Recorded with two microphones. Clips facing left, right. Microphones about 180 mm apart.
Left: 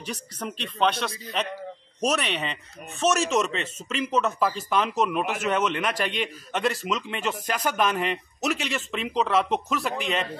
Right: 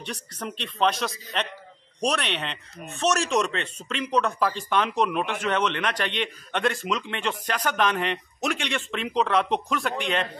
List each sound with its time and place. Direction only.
0.0 s speech: centre (ahead or behind)